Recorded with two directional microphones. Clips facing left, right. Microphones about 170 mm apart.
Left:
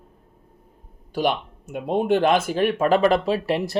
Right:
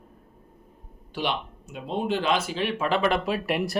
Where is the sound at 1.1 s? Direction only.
45° left (ahead or behind).